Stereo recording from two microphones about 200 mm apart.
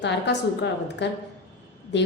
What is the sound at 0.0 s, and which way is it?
A woman's voice, 60° left (ahead or behind).